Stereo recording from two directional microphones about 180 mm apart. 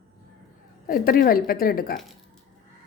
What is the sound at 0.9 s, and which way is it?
A woman's voice, 50° left (ahead or behind).